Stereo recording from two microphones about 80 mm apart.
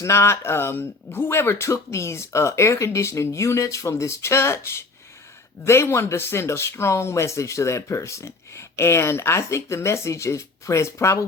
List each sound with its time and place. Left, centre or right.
0.0 s speech: left